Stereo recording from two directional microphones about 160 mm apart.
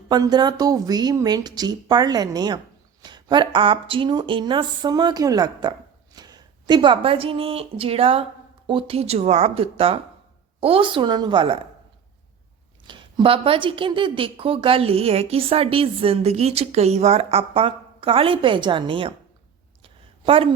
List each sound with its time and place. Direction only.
0.1 s a woman's voice: 25° right (ahead or behind)
12.9 s a woman's voice: 30° right (ahead or behind)
19.8 s a sound: 35° right (ahead or behind)